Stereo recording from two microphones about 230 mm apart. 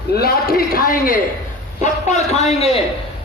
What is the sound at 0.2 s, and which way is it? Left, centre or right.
A man's voice, left.